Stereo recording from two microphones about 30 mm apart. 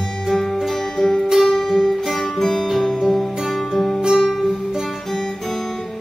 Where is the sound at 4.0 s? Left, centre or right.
Right.